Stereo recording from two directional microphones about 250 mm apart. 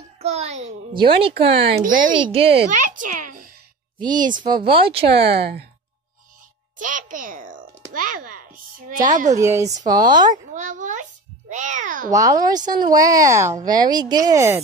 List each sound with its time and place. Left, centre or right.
0.2 s a child's voice: right
1.8 s speech: right
2.3 s a child's voice: right
3.1 s a child's voice: right
4.0 s a child's voice: centre
5.0 s speech: right
6.8 s a child's voice: right
7.9 s a sound: right
9.3 s a child's voice: centre
10.3 s a sound: right
11.5 s a child's voice: right
12.1 s a child's voice: centre